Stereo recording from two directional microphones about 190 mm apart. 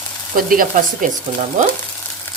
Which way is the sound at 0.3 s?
45° right (ahead or behind).